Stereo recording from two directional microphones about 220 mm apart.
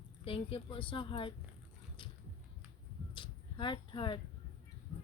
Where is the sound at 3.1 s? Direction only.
20° left (ahead or behind).